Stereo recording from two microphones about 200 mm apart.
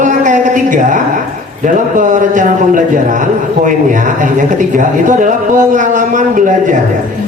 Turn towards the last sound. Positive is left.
turn(degrees=-40)  # may be behind; listen again after turning